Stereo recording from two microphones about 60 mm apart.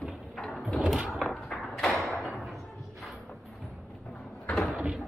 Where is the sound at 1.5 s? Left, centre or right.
Centre.